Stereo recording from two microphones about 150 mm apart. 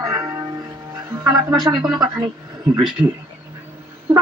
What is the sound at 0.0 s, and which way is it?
Music, 20° right (ahead or behind).